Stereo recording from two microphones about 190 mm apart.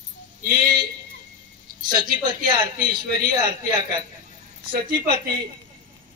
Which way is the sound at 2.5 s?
20° right (ahead or behind).